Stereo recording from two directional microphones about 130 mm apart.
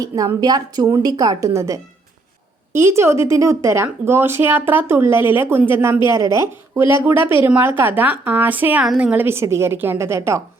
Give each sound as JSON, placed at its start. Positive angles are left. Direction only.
{"t": 0.0, "sound": "a woman's voice", "side_deg": -25}